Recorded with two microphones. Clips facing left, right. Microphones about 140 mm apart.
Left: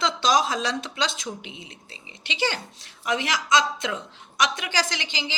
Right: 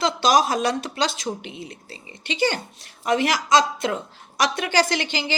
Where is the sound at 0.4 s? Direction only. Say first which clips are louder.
Right 4 dB; 55° right (ahead or behind).